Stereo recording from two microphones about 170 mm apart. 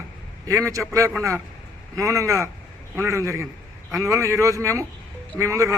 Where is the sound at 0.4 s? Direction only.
20° right (ahead or behind).